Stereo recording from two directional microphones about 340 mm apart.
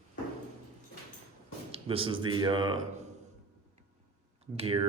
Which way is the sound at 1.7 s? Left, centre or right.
Centre.